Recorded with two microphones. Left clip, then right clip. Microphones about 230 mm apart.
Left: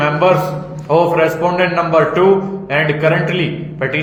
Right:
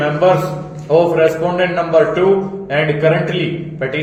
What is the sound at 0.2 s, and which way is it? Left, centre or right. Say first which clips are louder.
A man's voice: even; left.